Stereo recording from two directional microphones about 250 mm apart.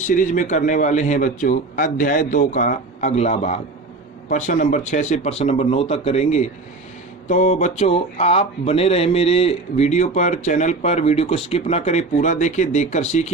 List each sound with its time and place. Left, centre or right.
0.1 s a man's voice: left